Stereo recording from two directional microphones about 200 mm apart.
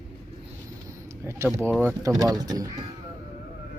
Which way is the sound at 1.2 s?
15° right (ahead or behind).